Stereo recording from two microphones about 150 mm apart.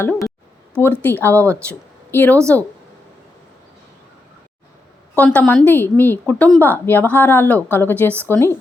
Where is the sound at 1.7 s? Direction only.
10° left (ahead or behind).